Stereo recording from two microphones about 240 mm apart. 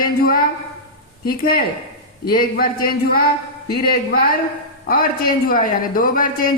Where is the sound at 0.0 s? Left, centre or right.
Left.